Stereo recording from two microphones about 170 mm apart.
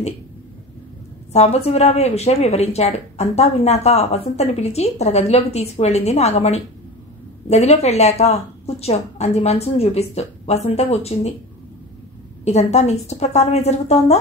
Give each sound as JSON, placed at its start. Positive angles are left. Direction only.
{"t": 1.3, "sound": "speech", "side_deg": 40}
{"t": 12.4, "sound": "speech", "side_deg": 40}